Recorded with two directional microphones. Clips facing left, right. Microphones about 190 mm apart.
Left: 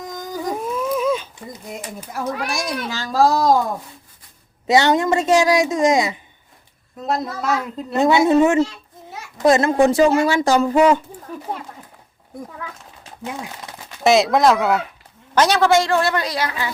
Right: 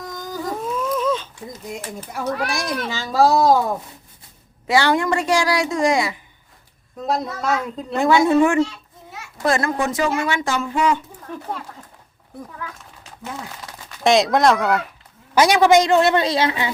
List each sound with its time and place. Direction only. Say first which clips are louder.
0.0 s speech: left 2 dB; 20° left (ahead or behind); by 3.6 s centre (ahead or behind)
4.6 s a woman's voice: left 2 dB; 20° left (ahead or behind)
7.0 s speech: even; centre (ahead or behind)
7.9 s a woman's voice: left 1 dB; 20° left (ahead or behind); by 11.0 s 40° left (ahead or behind)
13.2 s speech: left 2 dB; 15° left (ahead or behind)
14.0 s speech: left 1 dB; 5° left (ahead or behind)
15.4 s a man's voice: right 2 dB; 15° right (ahead or behind)